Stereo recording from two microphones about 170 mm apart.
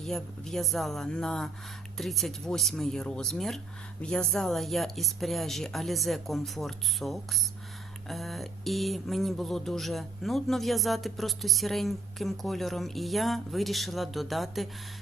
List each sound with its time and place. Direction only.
0.0 s speech: centre (ahead or behind)